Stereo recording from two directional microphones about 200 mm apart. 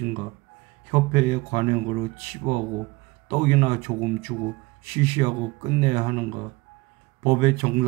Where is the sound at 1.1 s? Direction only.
30° right (ahead or behind).